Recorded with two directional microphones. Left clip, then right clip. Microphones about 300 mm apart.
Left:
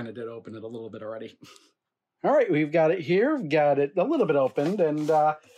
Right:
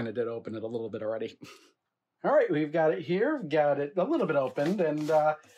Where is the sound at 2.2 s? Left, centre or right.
Left.